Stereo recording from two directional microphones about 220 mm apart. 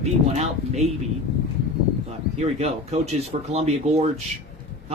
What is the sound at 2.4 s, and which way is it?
Speech, 30° right (ahead or behind).